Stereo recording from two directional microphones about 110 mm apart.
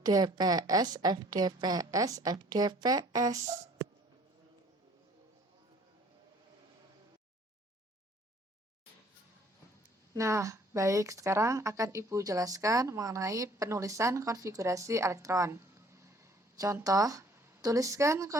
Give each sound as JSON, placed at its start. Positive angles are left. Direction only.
{"t": 0.0, "sound": "a woman's voice", "side_deg": -35}
{"t": 10.2, "sound": "a woman's voice", "side_deg": -30}